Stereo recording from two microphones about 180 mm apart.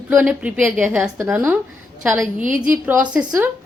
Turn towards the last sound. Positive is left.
turn(degrees=-5)  # may be behind; listen again after turning